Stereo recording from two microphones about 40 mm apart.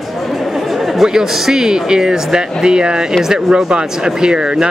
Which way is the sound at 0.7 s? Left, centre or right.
Centre.